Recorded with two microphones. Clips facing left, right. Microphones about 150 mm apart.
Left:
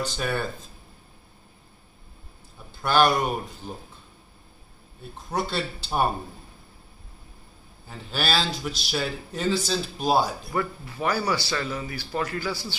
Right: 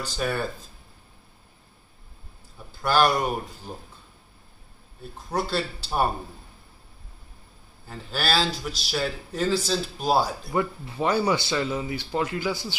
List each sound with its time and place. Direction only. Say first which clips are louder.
0.0 s speech: even; centre (ahead or behind)
2.8 s speech: left 1 dB; 5° right (ahead or behind)
5.3 s speech: right 1 dB; 5° right (ahead or behind)
7.9 s speech: right 1 dB; centre (ahead or behind)
10.5 s speech: right 2 dB; 20° right (ahead or behind)